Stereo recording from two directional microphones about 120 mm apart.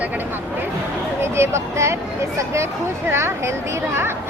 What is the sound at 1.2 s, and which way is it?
Speech, 20° right (ahead or behind).